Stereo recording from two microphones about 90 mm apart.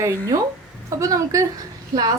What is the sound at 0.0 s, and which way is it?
A woman's voice, 35° right (ahead or behind).